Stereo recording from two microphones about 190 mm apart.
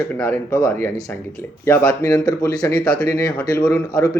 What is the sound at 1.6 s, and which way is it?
Speech, 10° left (ahead or behind).